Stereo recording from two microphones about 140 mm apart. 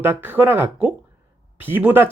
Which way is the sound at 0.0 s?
15° right (ahead or behind).